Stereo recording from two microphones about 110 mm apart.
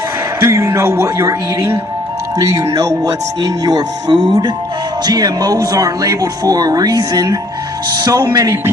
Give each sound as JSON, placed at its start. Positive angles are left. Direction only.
{"t": 0.3, "sound": "speech", "side_deg": -25}
{"t": 2.6, "sound": "speech", "side_deg": -35}